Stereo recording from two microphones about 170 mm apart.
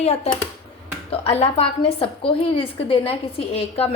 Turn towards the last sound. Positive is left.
turn(degrees=35)  # may be behind; listen again after turning